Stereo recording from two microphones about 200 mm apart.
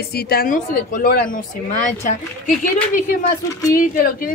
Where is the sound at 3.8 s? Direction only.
45° left (ahead or behind).